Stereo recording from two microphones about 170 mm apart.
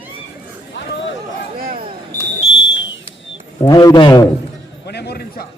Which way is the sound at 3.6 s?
20° left (ahead or behind).